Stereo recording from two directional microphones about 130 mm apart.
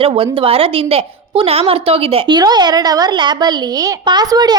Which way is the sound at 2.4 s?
35° right (ahead or behind).